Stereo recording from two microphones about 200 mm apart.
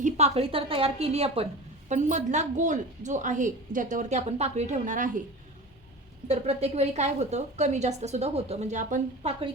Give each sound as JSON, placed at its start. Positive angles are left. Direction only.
{"t": 0.0, "sound": "a woman's voice", "side_deg": -30}
{"t": 6.2, "sound": "a woman's voice", "side_deg": -35}